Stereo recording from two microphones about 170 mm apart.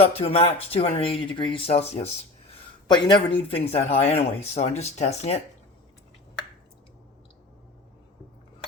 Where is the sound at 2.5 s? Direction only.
25° left (ahead or behind).